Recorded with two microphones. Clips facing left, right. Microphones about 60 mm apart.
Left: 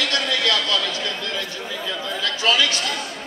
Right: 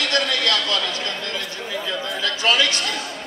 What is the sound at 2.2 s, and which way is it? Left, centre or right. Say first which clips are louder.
Speech: even; right.